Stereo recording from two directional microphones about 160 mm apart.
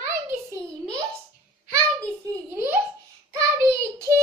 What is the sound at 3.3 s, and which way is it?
Child singing, 20° right (ahead or behind).